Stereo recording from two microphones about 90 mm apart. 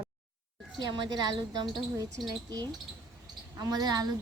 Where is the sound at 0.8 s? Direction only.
55° right (ahead or behind).